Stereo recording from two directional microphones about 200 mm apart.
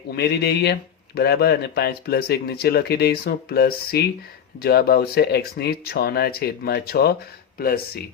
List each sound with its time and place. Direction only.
0.2 s speech: 55° left (ahead or behind)